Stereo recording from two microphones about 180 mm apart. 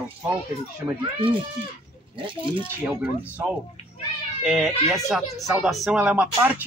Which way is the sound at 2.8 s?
10° right (ahead or behind).